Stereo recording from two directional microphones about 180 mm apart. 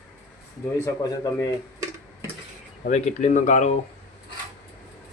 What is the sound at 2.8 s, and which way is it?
Speech, 40° left (ahead or behind).